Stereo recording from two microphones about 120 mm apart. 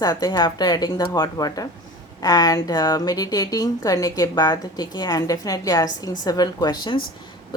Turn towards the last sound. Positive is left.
turn(degrees=35)  # may be behind; listen again after turning